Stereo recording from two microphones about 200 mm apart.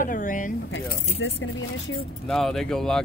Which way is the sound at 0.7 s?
70° left (ahead or behind).